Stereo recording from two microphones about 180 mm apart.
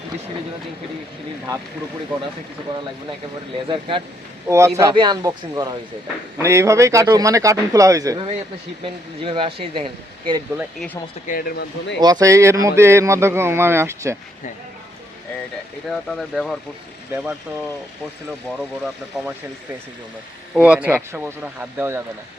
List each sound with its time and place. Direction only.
3.7 s speech: 30° right (ahead or behind)
4.4 s a man's voice: 15° right (ahead or behind)
8.8 s speech: 30° right (ahead or behind)
11.3 s speech: 55° left (ahead or behind)
11.9 s a man's voice: 20° right (ahead or behind)
15.9 s speech: centre (ahead or behind)
19.1 s speech: centre (ahead or behind)
20.5 s a man's voice: 5° right (ahead or behind)